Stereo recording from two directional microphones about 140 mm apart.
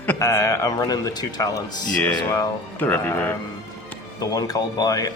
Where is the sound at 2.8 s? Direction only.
15° left (ahead or behind).